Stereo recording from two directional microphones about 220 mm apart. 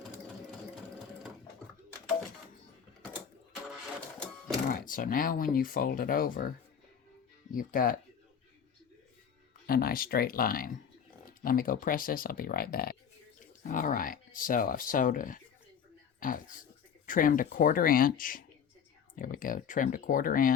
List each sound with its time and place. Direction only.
4.7 s speech: 40° left (ahead or behind)
7.5 s speech: 40° left (ahead or behind)
9.6 s speech: 40° left (ahead or behind)